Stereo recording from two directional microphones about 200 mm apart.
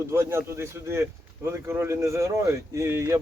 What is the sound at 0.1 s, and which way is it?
Speech, 15° right (ahead or behind).